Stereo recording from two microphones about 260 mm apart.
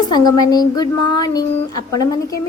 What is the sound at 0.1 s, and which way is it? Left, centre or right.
A woman's voice, centre.